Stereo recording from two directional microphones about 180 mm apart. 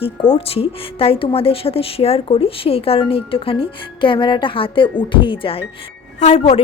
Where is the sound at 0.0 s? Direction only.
30° left (ahead or behind).